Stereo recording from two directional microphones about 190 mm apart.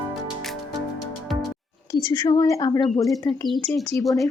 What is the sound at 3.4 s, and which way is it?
Speech, centre (ahead or behind).